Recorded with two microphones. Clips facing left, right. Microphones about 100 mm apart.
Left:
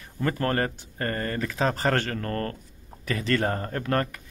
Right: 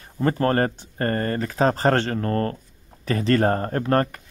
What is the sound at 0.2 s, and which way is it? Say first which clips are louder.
Speech: right 5 dB; 30° right (ahead or behind).